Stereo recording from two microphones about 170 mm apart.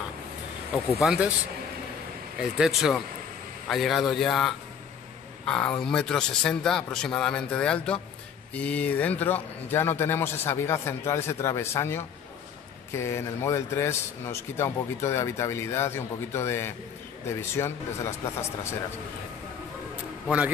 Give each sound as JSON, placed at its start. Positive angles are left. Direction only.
{"t": 1.0, "sound": "a man's voice", "side_deg": -5}
{"t": 2.5, "sound": "a man's voice", "side_deg": -5}
{"t": 20.2, "sound": "a man's voice", "side_deg": -5}